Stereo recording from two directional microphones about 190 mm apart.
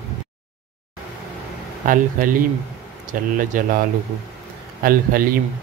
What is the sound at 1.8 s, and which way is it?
A man's voice, 45° right (ahead or behind).